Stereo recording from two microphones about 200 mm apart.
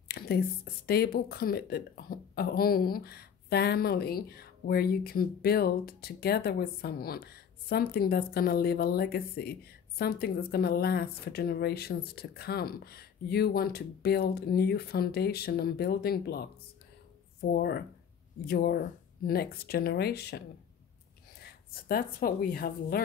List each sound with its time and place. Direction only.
0.1 s speech: 50° left (ahead or behind)